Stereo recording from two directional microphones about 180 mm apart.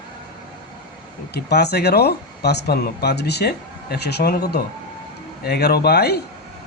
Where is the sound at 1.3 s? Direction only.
65° left (ahead or behind).